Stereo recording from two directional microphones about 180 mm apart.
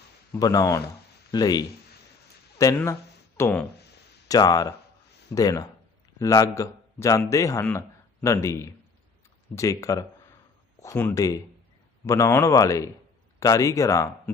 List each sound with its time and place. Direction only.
0.3 s speech: 20° left (ahead or behind)
4.3 s a man's voice: 20° left (ahead or behind)